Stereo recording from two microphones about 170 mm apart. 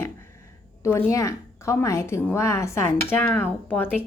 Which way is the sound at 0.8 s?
15° left (ahead or behind).